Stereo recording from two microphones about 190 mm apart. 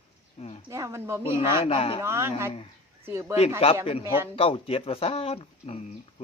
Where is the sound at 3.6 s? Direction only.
30° left (ahead or behind).